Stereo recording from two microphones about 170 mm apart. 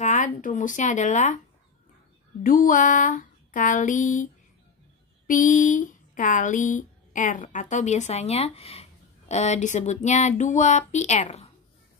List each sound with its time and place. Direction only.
0.0 s speech: 45° left (ahead or behind)
2.4 s speech: 55° left (ahead or behind)